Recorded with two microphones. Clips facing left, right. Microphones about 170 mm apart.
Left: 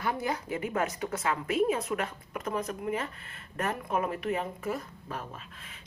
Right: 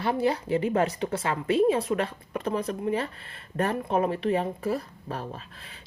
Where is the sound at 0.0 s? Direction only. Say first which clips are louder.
Right 6 dB; 30° right (ahead or behind).